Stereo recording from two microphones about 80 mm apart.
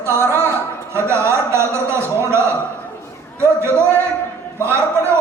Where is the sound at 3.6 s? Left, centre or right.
Right.